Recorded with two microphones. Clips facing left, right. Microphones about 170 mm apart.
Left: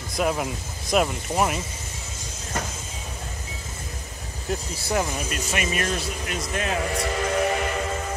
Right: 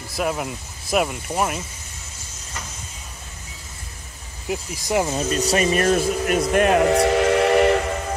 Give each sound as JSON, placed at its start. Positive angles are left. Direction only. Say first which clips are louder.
{"t": 0.1, "sound": "speech", "louder": "even", "side_deg": 0}
{"t": 4.5, "sound": "speech", "louder": "right 3 dB", "side_deg": -15}
{"t": 5.3, "sound": "speech", "louder": "right 8 dB", "side_deg": -35}